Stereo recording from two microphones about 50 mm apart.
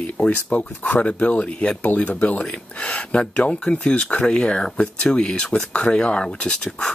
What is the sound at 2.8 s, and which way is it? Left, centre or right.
Speech, left.